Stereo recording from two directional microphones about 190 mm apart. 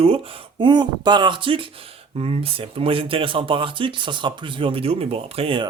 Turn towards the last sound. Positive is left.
turn(degrees=-30)  # may be behind; listen again after turning